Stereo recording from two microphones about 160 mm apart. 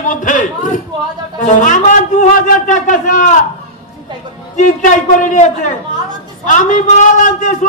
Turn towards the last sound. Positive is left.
turn(degrees=50)  # may be behind; listen again after turning